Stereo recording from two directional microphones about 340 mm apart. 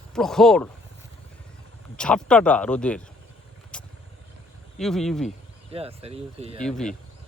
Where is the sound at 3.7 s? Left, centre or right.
Centre.